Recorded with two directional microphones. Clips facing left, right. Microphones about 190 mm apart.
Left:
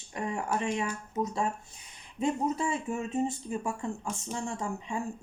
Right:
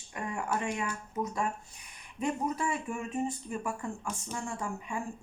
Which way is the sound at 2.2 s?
25° left (ahead or behind).